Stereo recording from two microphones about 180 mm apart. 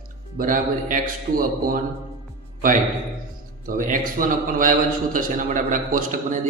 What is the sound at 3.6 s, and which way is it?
A man's voice, 50° right (ahead or behind).